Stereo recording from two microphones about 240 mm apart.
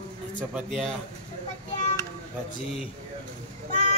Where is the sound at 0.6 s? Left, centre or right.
Centre.